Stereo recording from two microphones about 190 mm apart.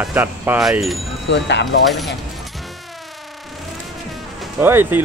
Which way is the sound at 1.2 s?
65° left (ahead or behind).